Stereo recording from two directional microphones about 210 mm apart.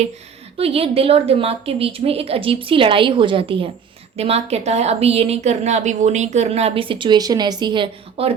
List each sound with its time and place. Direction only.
0.5 s a woman's voice: 25° right (ahead or behind)